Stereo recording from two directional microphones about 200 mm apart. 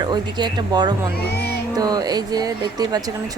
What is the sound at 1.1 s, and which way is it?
Speech, 50° left (ahead or behind).